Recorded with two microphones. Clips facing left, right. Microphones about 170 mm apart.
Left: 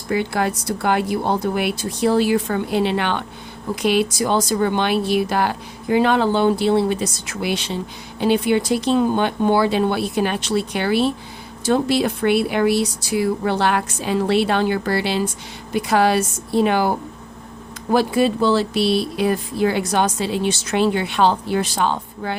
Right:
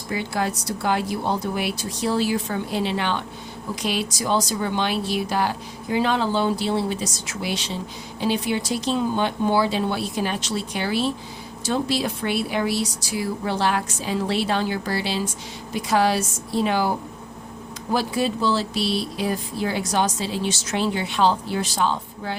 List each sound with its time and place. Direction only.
0.1 s speech: 60° left (ahead or behind)
17.9 s speech: 60° left (ahead or behind)